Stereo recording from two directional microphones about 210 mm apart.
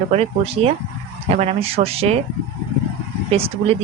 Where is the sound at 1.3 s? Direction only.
30° right (ahead or behind).